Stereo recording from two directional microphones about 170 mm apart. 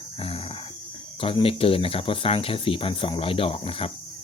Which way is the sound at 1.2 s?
35° left (ahead or behind).